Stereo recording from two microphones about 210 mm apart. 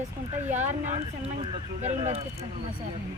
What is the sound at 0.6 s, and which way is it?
Speech, 35° right (ahead or behind).